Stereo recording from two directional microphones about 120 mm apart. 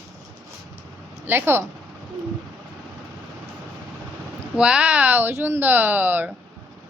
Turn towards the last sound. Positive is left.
turn(degrees=-15)  # may be behind; listen again after turning